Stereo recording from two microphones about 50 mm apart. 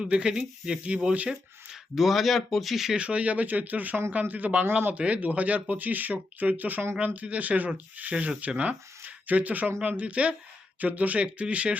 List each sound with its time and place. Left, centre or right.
0.0 s speech: centre
2.9 s speech: right